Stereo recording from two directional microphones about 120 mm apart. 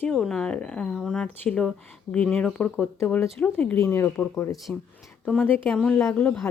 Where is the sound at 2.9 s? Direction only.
20° left (ahead or behind).